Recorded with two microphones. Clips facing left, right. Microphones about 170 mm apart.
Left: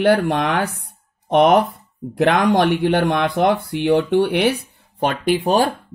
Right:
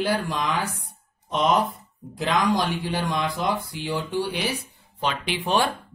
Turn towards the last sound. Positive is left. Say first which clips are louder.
# left 7 dB
turn(degrees=40)  # may be behind; listen again after turning